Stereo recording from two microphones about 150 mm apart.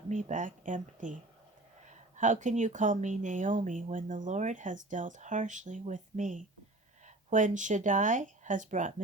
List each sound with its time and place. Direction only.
0.1 s speech: 55° right (ahead or behind)